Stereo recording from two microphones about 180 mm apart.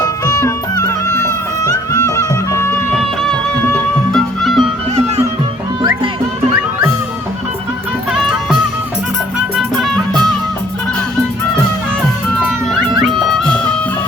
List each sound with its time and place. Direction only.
0.0 s music: 20° left (ahead or behind)
3.2 s music: 5° left (ahead or behind)
8.1 s music: 5° right (ahead or behind)
9.6 s music: centre (ahead or behind)
13.1 s music: 5° left (ahead or behind)